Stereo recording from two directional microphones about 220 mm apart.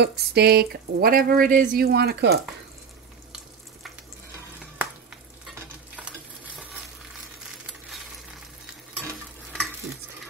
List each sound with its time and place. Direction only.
0.0 s speech: 45° right (ahead or behind)
5.9 s stir: 5° right (ahead or behind)